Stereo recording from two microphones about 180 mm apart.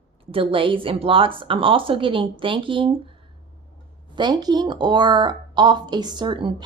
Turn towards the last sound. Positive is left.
turn(degrees=-25)  # may be behind; listen again after turning